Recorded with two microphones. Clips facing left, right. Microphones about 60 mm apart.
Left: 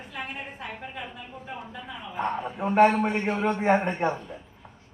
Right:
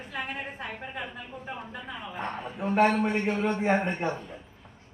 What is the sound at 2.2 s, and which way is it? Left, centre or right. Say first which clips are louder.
Speech: left 4 dB; centre.